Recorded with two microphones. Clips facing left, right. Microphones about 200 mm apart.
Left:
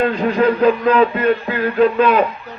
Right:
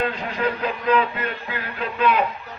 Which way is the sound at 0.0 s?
50° left (ahead or behind).